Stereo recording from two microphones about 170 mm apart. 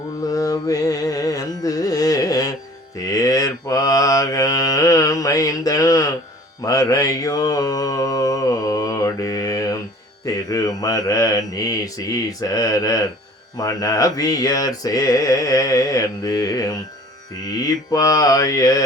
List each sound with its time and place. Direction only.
0.2 s music: 20° left (ahead or behind)
3.0 s mantra: 20° left (ahead or behind)